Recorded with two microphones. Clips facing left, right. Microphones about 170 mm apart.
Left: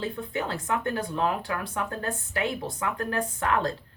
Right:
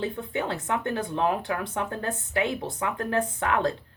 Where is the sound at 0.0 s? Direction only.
20° right (ahead or behind).